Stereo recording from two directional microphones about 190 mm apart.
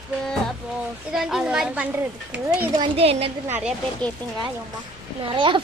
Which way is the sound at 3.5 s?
10° right (ahead or behind).